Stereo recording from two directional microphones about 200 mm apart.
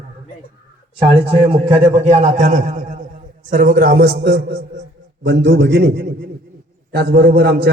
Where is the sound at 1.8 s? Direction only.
35° right (ahead or behind).